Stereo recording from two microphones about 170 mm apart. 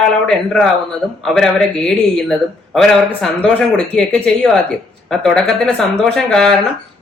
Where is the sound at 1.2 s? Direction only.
Centre (ahead or behind).